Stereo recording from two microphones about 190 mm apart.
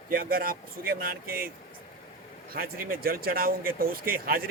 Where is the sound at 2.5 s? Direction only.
50° right (ahead or behind).